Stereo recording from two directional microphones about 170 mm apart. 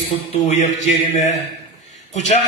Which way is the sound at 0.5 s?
45° left (ahead or behind).